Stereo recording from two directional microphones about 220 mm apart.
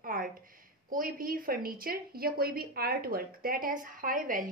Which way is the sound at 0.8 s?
40° right (ahead or behind).